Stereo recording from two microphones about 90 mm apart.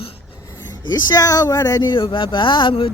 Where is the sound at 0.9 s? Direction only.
40° left (ahead or behind).